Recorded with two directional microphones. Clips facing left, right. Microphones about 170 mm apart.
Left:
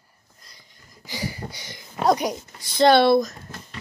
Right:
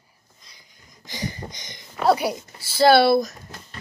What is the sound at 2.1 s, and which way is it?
Speech, 10° right (ahead or behind).